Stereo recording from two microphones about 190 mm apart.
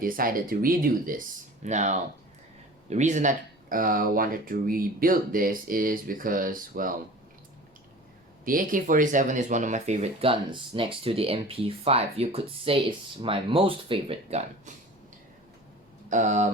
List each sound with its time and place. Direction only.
0.0 s speech: 45° right (ahead or behind)
8.4 s speech: 45° right (ahead or behind)
16.0 s speech: 40° right (ahead or behind)